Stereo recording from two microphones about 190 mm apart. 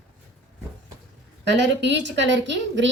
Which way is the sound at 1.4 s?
65° right (ahead or behind).